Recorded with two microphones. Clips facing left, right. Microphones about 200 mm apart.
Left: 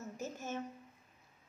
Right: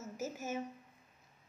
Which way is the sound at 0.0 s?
5° right (ahead or behind).